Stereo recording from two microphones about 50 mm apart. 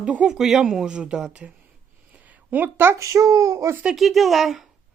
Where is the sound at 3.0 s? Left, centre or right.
Right.